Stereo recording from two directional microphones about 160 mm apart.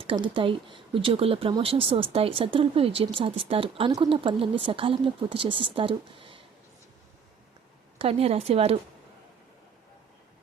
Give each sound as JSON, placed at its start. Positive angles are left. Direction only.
{"t": 0.0, "sound": "speech", "side_deg": -35}
{"t": 7.9, "sound": "speech", "side_deg": -35}